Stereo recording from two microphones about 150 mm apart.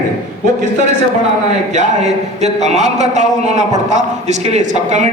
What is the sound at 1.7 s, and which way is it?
Speech, 50° right (ahead or behind).